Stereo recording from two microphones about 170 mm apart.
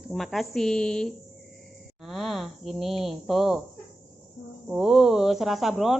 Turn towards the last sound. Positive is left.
turn(degrees=0)  # may be behind; listen again after turning